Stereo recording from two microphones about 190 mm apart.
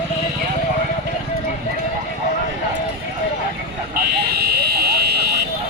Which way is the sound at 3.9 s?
55° right (ahead or behind).